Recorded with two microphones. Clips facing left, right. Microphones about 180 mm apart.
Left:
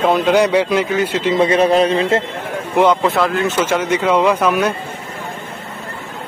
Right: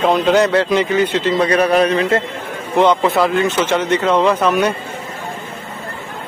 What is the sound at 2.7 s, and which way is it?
Speech, 5° left (ahead or behind).